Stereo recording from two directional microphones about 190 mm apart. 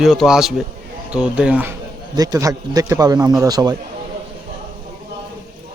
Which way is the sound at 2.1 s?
20° right (ahead or behind).